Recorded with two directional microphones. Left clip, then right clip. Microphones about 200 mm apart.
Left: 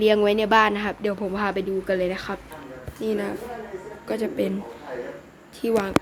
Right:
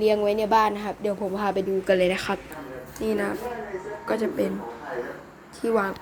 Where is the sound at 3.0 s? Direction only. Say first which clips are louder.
Even; 10° left (ahead or behind).